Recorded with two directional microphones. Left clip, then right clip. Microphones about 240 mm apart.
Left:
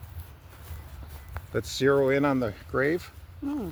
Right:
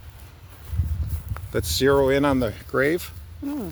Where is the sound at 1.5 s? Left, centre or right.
Right.